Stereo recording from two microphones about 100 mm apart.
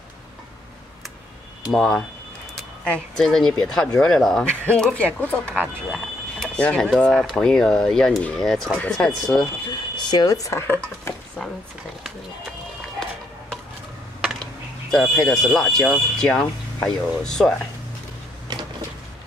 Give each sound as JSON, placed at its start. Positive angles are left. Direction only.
{"t": 1.7, "sound": "speech", "side_deg": 5}
{"t": 5.9, "sound": "speech", "side_deg": 0}
{"t": 9.7, "sound": "speech", "side_deg": 45}
{"t": 14.4, "sound": "a sound", "side_deg": 5}
{"t": 15.8, "sound": "speech", "side_deg": 5}